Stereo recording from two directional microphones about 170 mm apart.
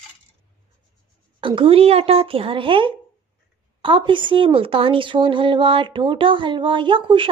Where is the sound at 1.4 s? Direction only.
30° right (ahead or behind).